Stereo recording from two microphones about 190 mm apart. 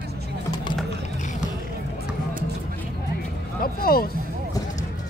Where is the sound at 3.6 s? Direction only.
50° left (ahead or behind).